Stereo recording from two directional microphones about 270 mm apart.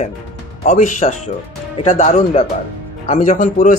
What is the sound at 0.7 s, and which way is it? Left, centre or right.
Speech, left.